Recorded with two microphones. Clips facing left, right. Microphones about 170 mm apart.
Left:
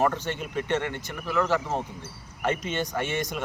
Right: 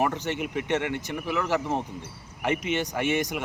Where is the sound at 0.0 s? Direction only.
15° right (ahead or behind).